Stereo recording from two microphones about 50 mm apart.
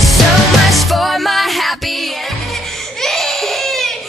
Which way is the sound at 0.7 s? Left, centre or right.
Centre.